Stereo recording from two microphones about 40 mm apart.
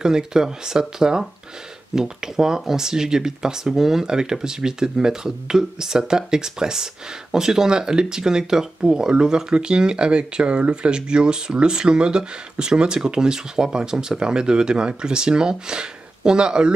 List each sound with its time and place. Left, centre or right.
0.0 s speech: centre